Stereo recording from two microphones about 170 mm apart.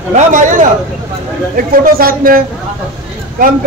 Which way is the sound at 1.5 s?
55° right (ahead or behind).